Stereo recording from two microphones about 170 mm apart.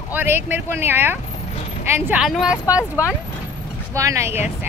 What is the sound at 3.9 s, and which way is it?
Speech, 20° right (ahead or behind).